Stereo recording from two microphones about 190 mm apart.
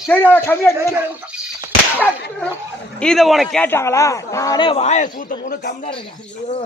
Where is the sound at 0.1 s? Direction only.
10° left (ahead or behind).